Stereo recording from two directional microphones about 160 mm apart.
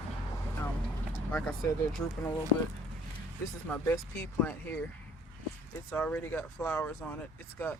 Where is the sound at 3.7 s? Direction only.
15° left (ahead or behind).